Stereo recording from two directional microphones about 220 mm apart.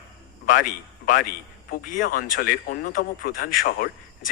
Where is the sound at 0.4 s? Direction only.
40° left (ahead or behind).